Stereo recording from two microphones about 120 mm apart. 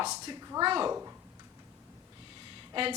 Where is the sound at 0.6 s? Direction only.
40° right (ahead or behind).